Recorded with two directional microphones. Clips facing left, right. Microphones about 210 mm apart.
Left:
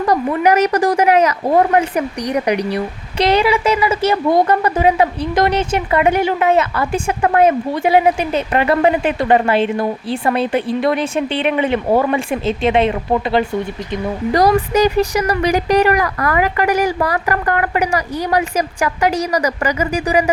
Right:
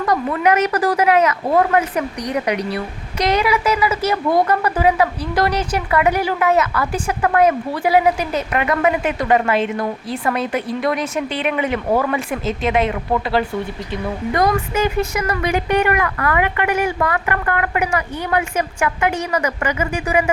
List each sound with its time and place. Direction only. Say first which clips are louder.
0.4 s a woman's voice: left 3 dB; 30° left (ahead or behind)
3.2 s a woman's voice: left 3 dB; 30° left (ahead or behind)